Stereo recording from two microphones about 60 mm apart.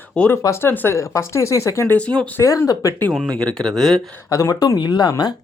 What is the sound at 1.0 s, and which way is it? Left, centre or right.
Speech, left.